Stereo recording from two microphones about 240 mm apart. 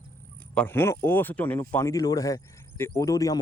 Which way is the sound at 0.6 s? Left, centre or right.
Centre.